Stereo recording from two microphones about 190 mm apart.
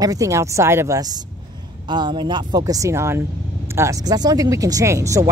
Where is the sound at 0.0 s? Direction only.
20° right (ahead or behind).